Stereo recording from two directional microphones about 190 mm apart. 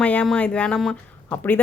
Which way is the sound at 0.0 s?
5° left (ahead or behind).